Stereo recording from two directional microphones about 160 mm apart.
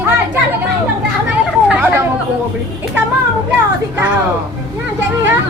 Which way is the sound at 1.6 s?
15° right (ahead or behind).